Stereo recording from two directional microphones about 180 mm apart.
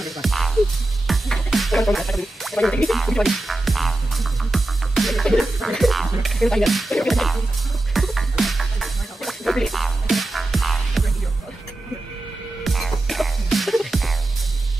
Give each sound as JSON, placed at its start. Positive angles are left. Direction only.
{"t": 0.0, "sound": "music", "side_deg": 0}
{"t": 12.6, "sound": "music", "side_deg": 0}